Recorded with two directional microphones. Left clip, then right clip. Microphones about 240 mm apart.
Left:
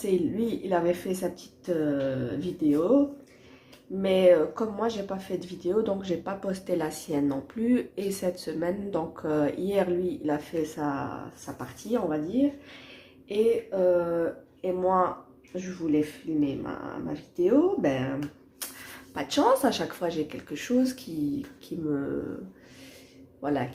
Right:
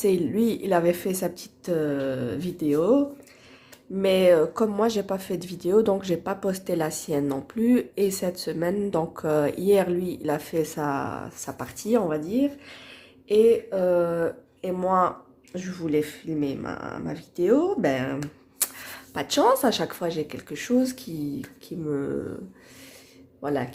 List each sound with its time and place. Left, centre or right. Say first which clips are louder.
0.0 s speech: right 4 dB; right
4.0 s speech: right 2 dB; right
23.4 s speech: right 2 dB; right